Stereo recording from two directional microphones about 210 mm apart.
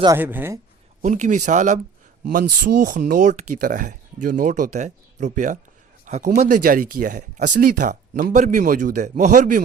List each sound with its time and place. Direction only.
0.0 s speech: 10° right (ahead or behind)
1.0 s speech: 35° right (ahead or behind)